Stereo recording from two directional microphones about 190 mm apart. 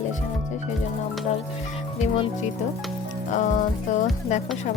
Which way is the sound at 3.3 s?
40° left (ahead or behind).